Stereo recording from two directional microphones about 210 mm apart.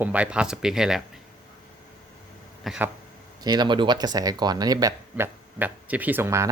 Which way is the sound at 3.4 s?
20° right (ahead or behind).